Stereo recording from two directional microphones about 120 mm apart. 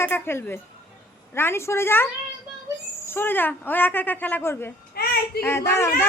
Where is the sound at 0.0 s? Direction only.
20° left (ahead or behind).